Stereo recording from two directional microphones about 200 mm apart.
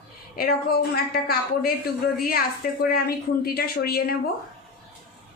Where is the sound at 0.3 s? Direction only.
50° left (ahead or behind).